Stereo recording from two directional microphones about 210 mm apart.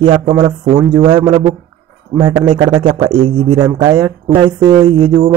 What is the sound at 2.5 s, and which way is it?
A man's voice, 25° right (ahead or behind).